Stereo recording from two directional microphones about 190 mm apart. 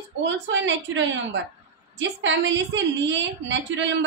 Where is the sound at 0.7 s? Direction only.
75° right (ahead or behind).